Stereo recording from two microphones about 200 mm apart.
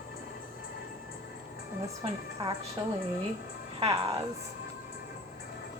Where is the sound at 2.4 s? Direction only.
25° right (ahead or behind).